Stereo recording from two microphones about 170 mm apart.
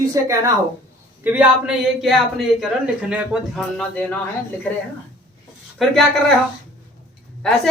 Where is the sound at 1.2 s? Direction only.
10° right (ahead or behind).